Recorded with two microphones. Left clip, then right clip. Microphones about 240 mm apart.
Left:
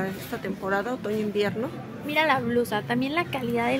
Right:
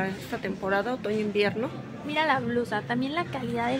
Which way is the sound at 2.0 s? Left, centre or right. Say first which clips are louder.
Left 2 dB; centre.